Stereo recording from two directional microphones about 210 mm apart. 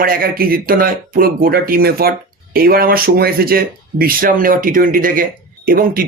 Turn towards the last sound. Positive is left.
turn(degrees=-45)  # may be behind; listen again after turning